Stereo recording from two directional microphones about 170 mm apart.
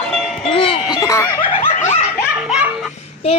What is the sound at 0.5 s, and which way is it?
Music, 30° left (ahead or behind).